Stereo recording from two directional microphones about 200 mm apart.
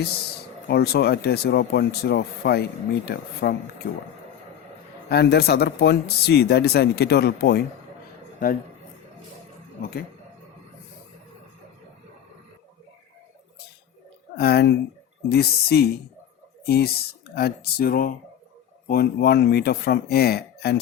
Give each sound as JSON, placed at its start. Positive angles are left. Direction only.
{"t": 0.7, "sound": "speech", "side_deg": 55}
{"t": 5.0, "sound": "speech", "side_deg": 55}
{"t": 14.3, "sound": "speech", "side_deg": 50}